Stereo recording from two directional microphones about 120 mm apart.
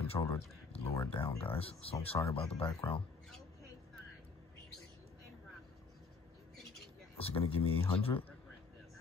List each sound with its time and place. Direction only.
0.0 s speech: 55° left (ahead or behind)
7.2 s speech: 50° left (ahead or behind)